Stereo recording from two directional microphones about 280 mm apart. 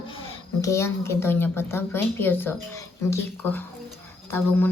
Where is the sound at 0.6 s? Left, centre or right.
Centre.